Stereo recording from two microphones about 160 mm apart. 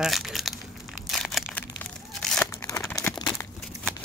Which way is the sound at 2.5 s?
20° left (ahead or behind).